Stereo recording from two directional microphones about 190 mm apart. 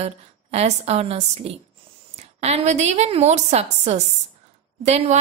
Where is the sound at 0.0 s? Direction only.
35° right (ahead or behind).